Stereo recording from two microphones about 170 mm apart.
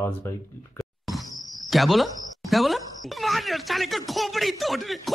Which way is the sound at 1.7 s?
Centre (ahead or behind).